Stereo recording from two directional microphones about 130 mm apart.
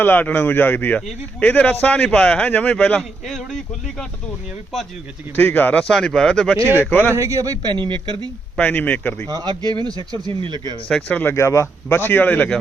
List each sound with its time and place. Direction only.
0.0 s a man's voice: 15° left (ahead or behind)
5.4 s a man's voice: 15° left (ahead or behind)
5.9 s a man's voice: 5° left (ahead or behind)
7.1 s a man's voice: 25° right (ahead or behind); by 8.3 s 40° right (ahead or behind)
8.5 s a man's voice: 10° left (ahead or behind)
9.3 s a man's voice: 35° right (ahead or behind)
10.8 s a man's voice: 10° left (ahead or behind)